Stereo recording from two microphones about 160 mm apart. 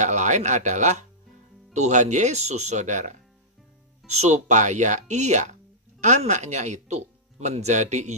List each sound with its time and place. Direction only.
0.0 s speech: 50° right (ahead or behind)
4.2 s speech: 50° right (ahead or behind)